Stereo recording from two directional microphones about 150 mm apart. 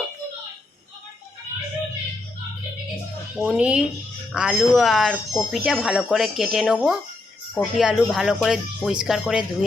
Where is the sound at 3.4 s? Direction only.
10° right (ahead or behind).